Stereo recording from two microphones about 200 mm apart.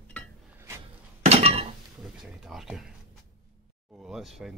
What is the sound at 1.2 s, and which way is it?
Breaking, 30° right (ahead or behind).